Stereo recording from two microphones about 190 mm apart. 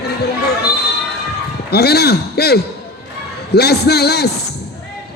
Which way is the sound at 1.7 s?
60° left (ahead or behind).